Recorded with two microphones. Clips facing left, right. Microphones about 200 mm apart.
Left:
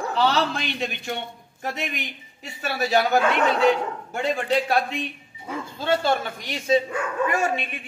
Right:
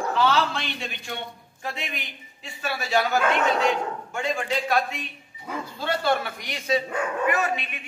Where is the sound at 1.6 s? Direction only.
45° left (ahead or behind).